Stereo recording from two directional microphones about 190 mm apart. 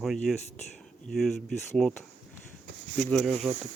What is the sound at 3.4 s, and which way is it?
Speech, 35° right (ahead or behind).